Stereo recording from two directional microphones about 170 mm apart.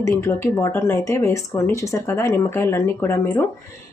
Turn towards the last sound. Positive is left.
turn(degrees=15)  # may be behind; listen again after turning